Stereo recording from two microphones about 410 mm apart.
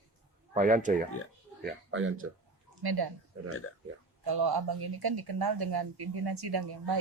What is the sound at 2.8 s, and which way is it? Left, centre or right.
Speech, right.